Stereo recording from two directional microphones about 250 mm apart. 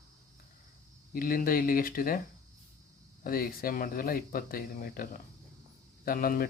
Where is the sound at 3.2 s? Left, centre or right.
Left.